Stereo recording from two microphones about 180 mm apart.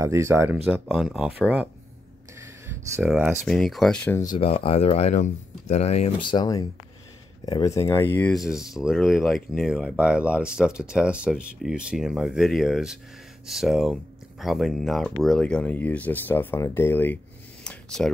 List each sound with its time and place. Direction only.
0.0 s speech: 15° right (ahead or behind)
0.7 s speech: centre (ahead or behind)
3.0 s speech: 5° right (ahead or behind)
4.4 s speech: 30° left (ahead or behind); by 8.3 s 10° left (ahead or behind)
8.4 s speech: 5° right (ahead or behind)
17.6 s a sound: 5° left (ahead or behind)